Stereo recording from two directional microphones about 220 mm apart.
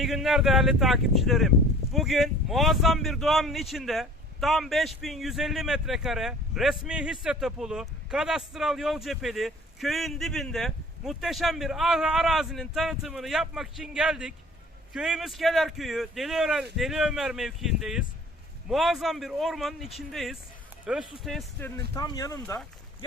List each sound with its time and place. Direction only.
0.0 s speech: centre (ahead or behind)
21.9 s speech: 15° left (ahead or behind)